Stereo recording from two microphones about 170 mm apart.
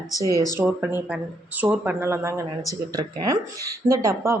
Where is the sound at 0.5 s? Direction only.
15° right (ahead or behind).